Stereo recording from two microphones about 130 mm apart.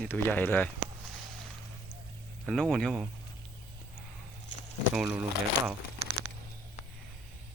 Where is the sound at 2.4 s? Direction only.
5° left (ahead or behind).